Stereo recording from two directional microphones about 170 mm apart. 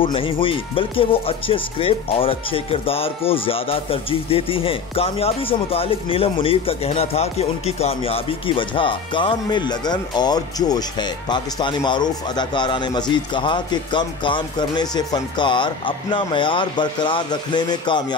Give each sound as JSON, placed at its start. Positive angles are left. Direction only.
{"t": 0.0, "sound": "speech", "side_deg": 30}